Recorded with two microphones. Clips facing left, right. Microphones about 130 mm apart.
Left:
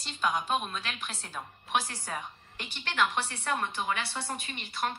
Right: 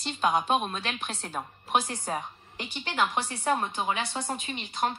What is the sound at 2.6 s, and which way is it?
A woman's voice, 15° right (ahead or behind).